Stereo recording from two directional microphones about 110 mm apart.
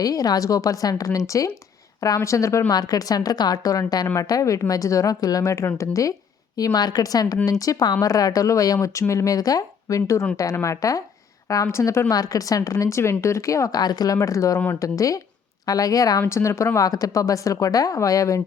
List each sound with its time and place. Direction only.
0.0 s a woman's voice: 35° left (ahead or behind)